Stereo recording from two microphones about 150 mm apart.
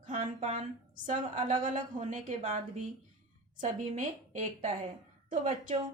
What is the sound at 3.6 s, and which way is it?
A woman's voice, 55° right (ahead or behind).